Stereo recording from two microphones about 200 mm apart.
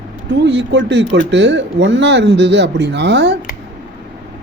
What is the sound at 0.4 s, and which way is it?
Speech, 65° right (ahead or behind).